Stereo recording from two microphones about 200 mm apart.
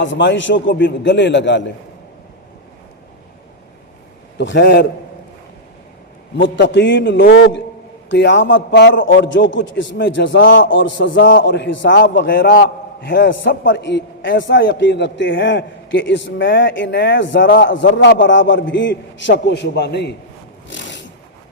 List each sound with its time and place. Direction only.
0.0 s a man's voice: 65° left (ahead or behind)
4.4 s a man's voice: 60° left (ahead or behind)
6.3 s a man's voice: 65° left (ahead or behind)
20.7 s a sound: 65° left (ahead or behind)